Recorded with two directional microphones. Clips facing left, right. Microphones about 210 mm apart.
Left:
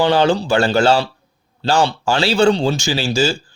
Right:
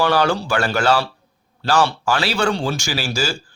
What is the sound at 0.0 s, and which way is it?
A man's voice, 20° left (ahead or behind).